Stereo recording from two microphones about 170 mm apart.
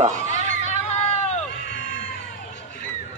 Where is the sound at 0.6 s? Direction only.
45° left (ahead or behind).